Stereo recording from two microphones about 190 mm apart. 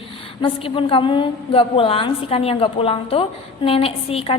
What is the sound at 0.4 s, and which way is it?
A woman's voice, 30° left (ahead or behind).